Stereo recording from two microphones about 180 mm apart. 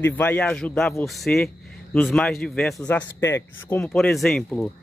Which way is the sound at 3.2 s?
15° left (ahead or behind).